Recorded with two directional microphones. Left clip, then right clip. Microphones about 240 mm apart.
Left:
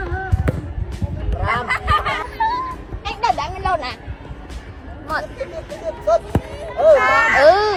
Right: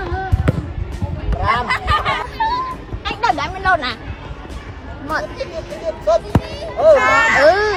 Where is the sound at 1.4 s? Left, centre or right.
Right.